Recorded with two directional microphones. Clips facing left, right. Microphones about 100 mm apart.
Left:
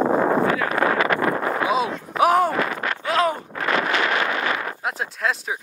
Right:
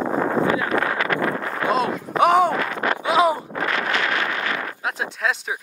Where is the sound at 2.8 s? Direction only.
15° right (ahead or behind).